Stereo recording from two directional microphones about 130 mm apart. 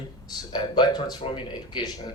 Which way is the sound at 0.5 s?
35° left (ahead or behind).